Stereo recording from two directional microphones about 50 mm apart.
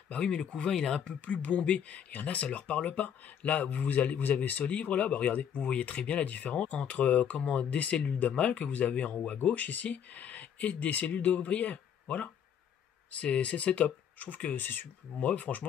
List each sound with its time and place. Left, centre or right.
0.2 s speech: centre
1.0 s speech: left